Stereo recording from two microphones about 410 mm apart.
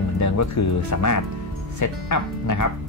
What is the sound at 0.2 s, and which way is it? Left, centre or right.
Speech, left.